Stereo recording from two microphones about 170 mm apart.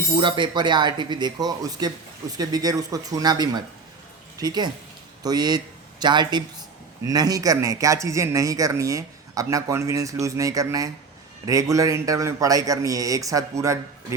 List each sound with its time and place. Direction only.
0.2 s speech: 30° right (ahead or behind)